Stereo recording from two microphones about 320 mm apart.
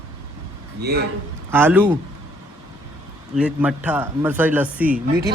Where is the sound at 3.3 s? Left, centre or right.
Centre.